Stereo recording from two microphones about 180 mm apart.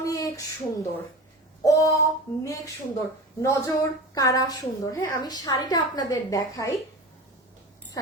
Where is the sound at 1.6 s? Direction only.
20° left (ahead or behind).